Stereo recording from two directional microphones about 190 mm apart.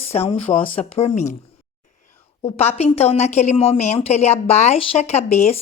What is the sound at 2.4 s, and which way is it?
A woman's voice, 35° left (ahead or behind).